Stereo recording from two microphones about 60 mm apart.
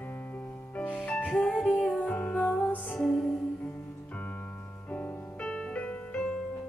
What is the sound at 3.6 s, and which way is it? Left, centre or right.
Music, left.